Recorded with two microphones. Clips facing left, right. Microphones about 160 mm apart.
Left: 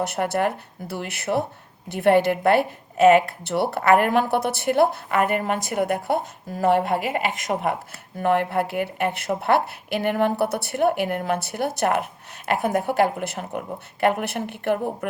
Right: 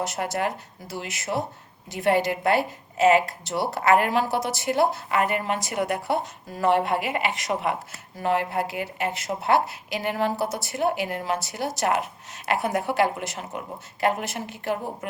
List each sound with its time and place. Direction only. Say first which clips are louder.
0.0 s speech: left 4 dB; 55° left (ahead or behind)